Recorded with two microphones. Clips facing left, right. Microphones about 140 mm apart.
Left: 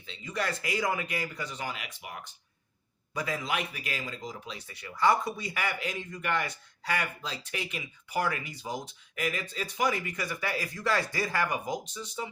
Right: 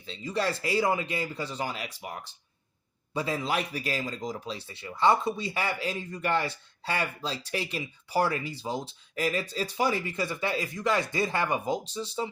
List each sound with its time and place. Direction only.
0.0 s speech: 35° right (ahead or behind)